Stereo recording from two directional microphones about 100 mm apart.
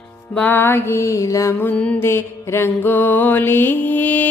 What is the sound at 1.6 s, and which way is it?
Music, 15° left (ahead or behind).